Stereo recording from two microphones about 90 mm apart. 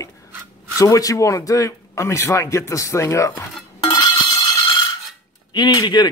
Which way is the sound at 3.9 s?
50° left (ahead or behind).